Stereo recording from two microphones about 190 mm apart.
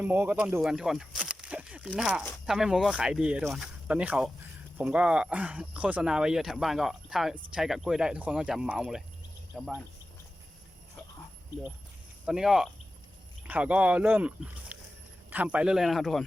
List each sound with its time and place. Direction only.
0.0 s speech: 10° right (ahead or behind)
12.2 s speech: 5° right (ahead or behind)